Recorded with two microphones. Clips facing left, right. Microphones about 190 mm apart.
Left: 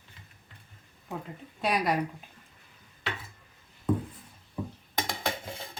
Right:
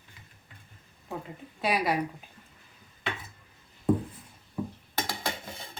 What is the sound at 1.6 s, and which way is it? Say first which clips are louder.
Speech: even; centre (ahead or behind).